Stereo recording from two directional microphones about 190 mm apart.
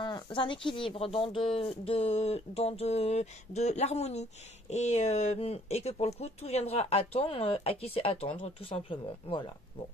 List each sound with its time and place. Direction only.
0.0 s speech: 25° left (ahead or behind)